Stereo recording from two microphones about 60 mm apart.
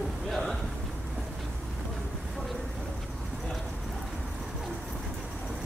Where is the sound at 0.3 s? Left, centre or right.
Centre.